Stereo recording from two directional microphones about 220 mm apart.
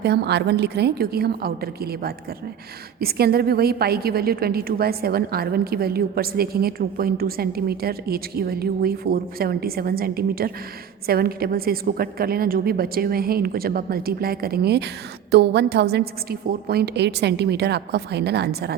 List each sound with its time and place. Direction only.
0.0 s a woman's voice: 50° right (ahead or behind)